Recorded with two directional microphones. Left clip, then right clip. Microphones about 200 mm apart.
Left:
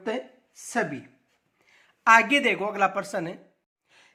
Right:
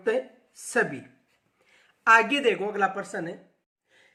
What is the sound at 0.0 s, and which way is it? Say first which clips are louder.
A woman's voice: right 5 dB; 20° left (ahead or behind).